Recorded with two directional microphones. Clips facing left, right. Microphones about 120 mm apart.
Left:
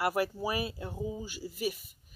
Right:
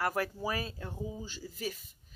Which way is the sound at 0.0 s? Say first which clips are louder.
Left 3 dB; 10° left (ahead or behind).